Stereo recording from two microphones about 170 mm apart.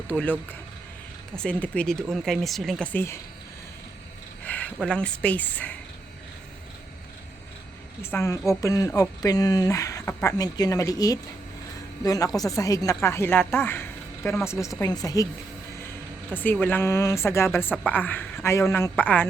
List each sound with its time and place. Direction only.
0.1 s a woman's voice: 10° left (ahead or behind)
1.4 s speech: 10° left (ahead or behind)
4.4 s speech: 10° left (ahead or behind)
8.1 s a woman's voice: 15° left (ahead or behind)
16.4 s a woman's voice: 10° left (ahead or behind)